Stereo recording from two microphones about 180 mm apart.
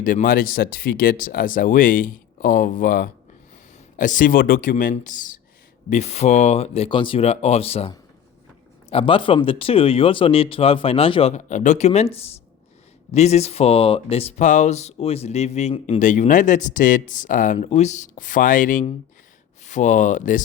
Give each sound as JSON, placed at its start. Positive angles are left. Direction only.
{"t": 0.0, "sound": "speech", "side_deg": 50}